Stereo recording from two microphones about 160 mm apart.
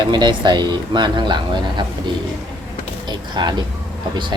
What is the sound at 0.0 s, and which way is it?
Speech, 30° right (ahead or behind).